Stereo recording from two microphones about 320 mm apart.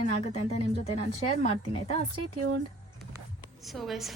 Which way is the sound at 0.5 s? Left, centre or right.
Centre.